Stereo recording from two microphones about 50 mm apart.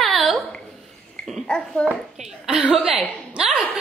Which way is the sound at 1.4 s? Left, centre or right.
Centre.